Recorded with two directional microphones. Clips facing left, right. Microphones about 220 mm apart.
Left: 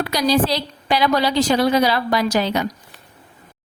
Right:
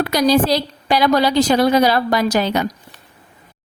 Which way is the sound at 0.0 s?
50° right (ahead or behind).